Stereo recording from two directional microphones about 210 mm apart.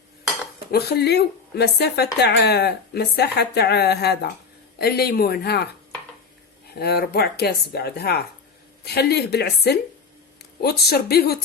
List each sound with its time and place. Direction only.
0.7 s speech: 50° left (ahead or behind)
6.7 s speech: 50° left (ahead or behind)